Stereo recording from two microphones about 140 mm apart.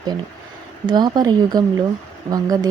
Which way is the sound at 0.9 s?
30° right (ahead or behind).